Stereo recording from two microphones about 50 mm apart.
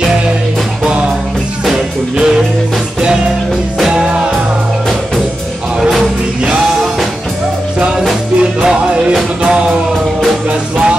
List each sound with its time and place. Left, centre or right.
1.7 s music: centre
3.9 s music: centre
5.8 s music: centre
8.4 s music: centre